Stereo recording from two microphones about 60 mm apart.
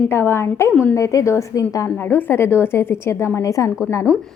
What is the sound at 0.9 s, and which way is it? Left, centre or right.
Speech, left.